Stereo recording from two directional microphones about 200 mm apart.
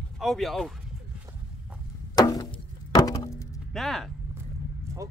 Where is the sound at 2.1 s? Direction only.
20° left (ahead or behind).